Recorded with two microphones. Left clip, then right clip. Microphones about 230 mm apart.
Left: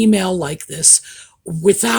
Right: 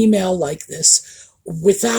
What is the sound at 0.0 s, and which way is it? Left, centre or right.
Speech, left.